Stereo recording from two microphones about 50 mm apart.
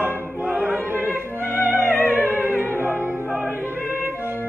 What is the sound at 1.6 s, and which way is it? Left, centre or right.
Music, right.